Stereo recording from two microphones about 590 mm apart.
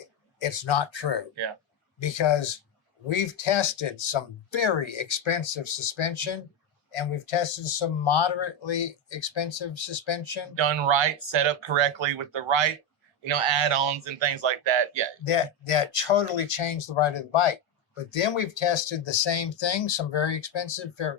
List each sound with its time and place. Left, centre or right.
0.3 s speech: left
10.5 s speech: right
15.2 s speech: left